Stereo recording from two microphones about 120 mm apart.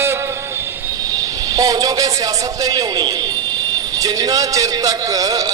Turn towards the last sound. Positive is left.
turn(degrees=-30)  # may be behind; listen again after turning